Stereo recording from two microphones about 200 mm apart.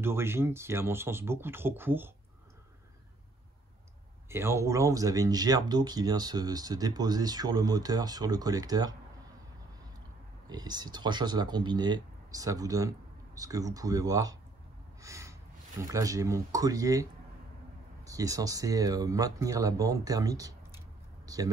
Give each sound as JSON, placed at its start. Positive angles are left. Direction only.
{"t": 0.0, "sound": "speech", "side_deg": -10}
{"t": 4.3, "sound": "speech", "side_deg": -15}
{"t": 10.5, "sound": "speech", "side_deg": -20}
{"t": 15.0, "sound": "a sound", "side_deg": -15}
{"t": 15.9, "sound": "speech", "side_deg": -15}